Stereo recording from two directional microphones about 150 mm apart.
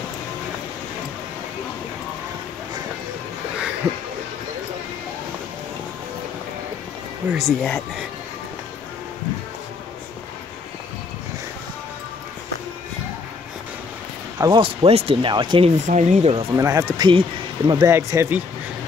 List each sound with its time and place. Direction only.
7.3 s speech: centre (ahead or behind)
14.4 s speech: 35° right (ahead or behind)
15.9 s speech: 50° right (ahead or behind)
16.5 s speech: 20° right (ahead or behind)
17.9 s speech: 15° right (ahead or behind)